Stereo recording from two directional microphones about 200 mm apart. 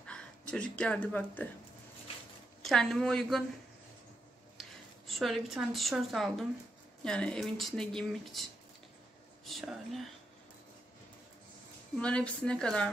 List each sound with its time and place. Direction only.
0.0 s speech: 5° left (ahead or behind)
2.6 s speech: centre (ahead or behind)
4.6 s speech: centre (ahead or behind)
9.5 s speech: centre (ahead or behind)
12.0 s speech: 5° left (ahead or behind)